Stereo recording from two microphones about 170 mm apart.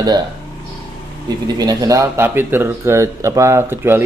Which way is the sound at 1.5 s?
20° right (ahead or behind).